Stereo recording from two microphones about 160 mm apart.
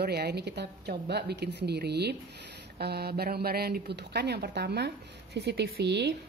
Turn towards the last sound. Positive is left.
turn(degrees=-90)